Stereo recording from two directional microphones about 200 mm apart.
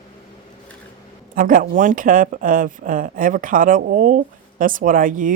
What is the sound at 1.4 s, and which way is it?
Speech, 45° right (ahead or behind).